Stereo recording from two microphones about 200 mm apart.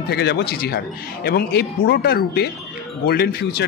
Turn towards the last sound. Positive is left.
turn(degrees=55)  # may be behind; listen again after turning